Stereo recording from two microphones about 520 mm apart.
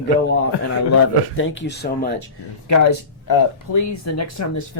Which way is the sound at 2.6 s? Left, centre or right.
Left.